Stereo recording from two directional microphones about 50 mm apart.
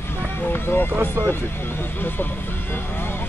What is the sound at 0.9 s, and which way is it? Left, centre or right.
Speech, right.